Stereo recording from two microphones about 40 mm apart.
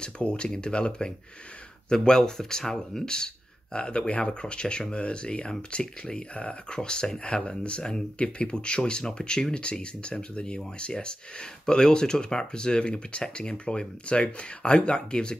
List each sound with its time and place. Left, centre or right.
0.0 s speech: left; by 3.0 s centre
3.7 s speech: left